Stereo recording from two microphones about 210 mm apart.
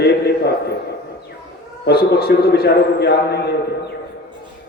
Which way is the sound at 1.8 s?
50° left (ahead or behind).